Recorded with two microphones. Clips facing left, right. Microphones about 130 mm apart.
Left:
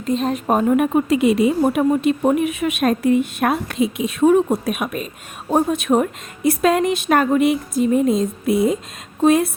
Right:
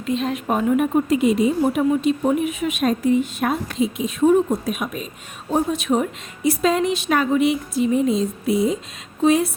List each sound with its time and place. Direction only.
0.0 s speech: 40° left (ahead or behind)
0.8 s a woman's voice: 80° left; by 9.5 s 55° left (ahead or behind)